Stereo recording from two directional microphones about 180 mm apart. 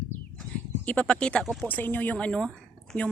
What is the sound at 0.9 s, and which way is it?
Speech, 5° left (ahead or behind).